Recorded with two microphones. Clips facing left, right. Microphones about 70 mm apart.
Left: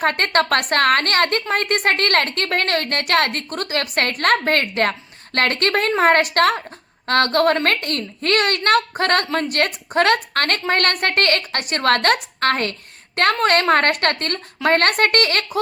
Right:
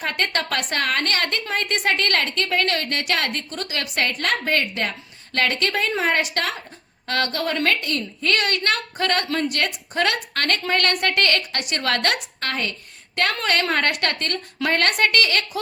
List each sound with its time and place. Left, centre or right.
0.0 s a woman's voice: left